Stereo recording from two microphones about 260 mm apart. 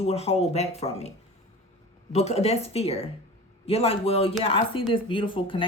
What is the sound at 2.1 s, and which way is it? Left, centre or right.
Speech, left.